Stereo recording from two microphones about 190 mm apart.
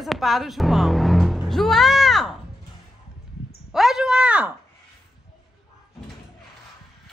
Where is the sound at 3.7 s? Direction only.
Centre (ahead or behind).